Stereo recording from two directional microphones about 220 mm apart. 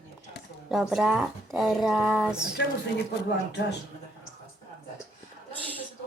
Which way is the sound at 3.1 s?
50° left (ahead or behind).